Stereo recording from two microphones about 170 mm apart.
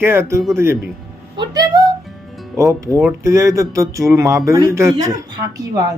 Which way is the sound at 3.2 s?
20° right (ahead or behind).